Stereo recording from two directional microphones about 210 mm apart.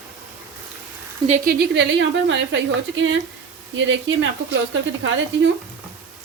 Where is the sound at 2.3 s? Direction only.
65° right (ahead or behind).